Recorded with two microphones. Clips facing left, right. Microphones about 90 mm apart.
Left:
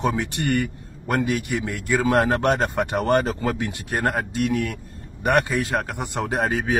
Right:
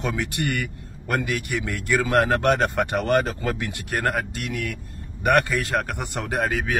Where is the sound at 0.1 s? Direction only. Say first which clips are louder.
Left 3 dB; 25° left (ahead or behind).